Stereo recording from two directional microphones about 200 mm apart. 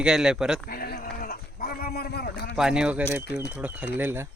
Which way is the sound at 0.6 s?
50° left (ahead or behind).